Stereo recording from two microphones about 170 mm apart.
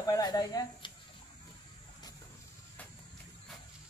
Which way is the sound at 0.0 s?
20° left (ahead or behind).